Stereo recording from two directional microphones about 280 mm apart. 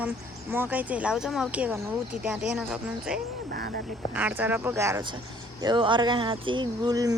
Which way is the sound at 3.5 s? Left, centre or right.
Right.